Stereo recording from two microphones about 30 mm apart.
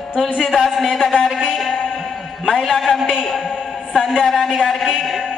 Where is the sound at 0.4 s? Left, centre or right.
Centre.